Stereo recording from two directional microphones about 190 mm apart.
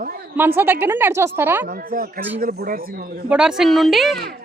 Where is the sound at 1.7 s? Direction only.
50° right (ahead or behind).